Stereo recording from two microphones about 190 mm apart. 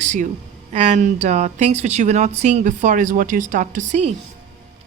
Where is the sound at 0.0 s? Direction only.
40° right (ahead or behind).